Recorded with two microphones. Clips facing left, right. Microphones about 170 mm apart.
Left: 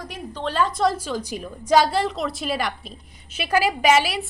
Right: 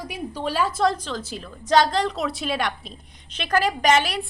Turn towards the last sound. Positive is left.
turn(degrees=5)  # may be behind; listen again after turning